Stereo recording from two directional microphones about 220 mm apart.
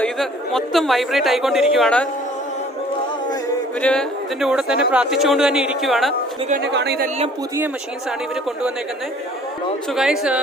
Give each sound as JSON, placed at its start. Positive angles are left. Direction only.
{"t": 0.0, "sound": "speech", "side_deg": 0}
{"t": 3.8, "sound": "speech", "side_deg": 5}
{"t": 6.5, "sound": "speech", "side_deg": -50}
{"t": 9.9, "sound": "speech", "side_deg": 0}